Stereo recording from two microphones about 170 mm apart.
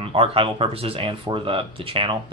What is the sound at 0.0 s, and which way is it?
Speech, 35° right (ahead or behind).